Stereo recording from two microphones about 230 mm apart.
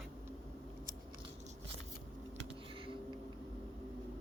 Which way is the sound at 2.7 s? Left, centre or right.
Right.